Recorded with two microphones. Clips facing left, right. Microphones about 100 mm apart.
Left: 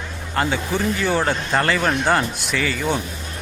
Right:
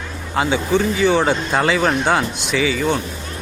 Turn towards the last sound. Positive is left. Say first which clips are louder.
# right 4 dB
turn(degrees=0)  # may be behind; listen again after turning